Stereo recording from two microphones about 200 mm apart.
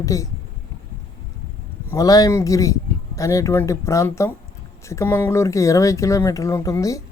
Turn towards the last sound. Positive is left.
turn(degrees=15)  # may be behind; listen again after turning